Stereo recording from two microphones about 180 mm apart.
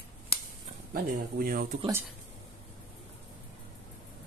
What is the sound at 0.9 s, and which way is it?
Speech, 55° right (ahead or behind).